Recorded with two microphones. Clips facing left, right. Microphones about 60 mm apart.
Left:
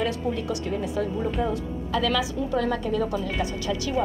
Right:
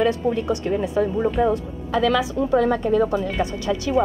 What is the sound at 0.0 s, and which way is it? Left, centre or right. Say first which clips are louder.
A woman's voice: right 6 dB; right.